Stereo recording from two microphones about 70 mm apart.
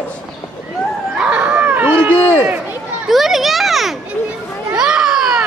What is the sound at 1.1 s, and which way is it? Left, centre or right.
Dog, centre.